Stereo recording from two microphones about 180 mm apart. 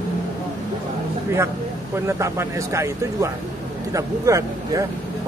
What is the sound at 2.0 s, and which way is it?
Speech, 15° right (ahead or behind).